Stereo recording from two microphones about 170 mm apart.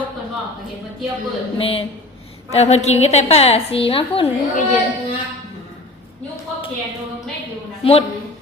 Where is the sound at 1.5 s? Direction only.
35° left (ahead or behind).